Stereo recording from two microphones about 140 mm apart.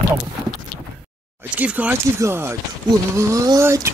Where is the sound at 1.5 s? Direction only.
10° right (ahead or behind).